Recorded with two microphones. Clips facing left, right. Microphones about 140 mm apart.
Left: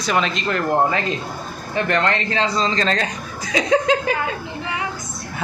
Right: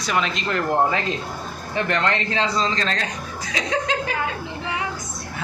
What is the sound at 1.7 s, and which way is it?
Speech, 15° right (ahead or behind).